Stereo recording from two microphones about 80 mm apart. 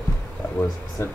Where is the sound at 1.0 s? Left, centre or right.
Left.